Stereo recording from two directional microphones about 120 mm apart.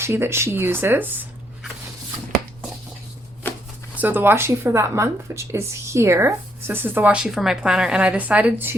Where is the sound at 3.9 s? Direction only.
15° right (ahead or behind).